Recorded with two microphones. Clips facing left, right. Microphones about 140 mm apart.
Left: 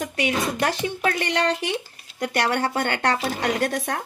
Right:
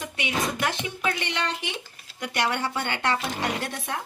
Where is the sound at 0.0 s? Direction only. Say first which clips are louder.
Left 4 dB; 45° left (ahead or behind).